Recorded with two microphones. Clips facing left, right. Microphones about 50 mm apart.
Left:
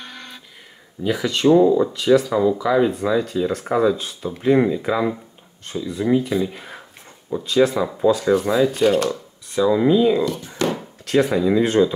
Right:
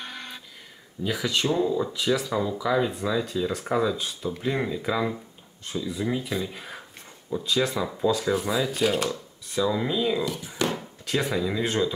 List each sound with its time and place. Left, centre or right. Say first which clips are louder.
0.0 s a sound: left 1 dB; centre
1.0 s speech: left 8 dB; centre
5.7 s speech: left 8 dB; centre
8.2 s speech: left 8 dB; centre
10.2 s a sound: left 5 dB; centre
10.8 s speech: left 9 dB; centre